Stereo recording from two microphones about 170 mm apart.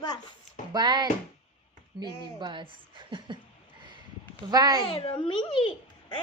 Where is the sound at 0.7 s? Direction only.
25° right (ahead or behind).